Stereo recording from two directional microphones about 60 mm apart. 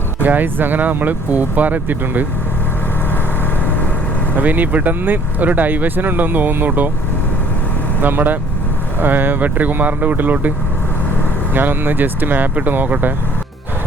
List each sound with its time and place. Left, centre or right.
0.2 s speech: right
3.6 s vehicle: left
4.4 s speech: right
8.0 s speech: right
11.5 s speech: right